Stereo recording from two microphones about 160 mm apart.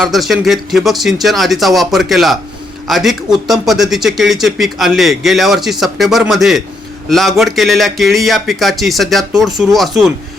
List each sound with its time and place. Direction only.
0.0 s speech: centre (ahead or behind)